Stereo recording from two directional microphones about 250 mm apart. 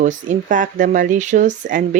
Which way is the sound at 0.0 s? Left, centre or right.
Right.